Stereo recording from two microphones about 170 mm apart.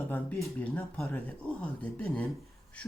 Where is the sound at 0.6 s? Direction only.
15° left (ahead or behind).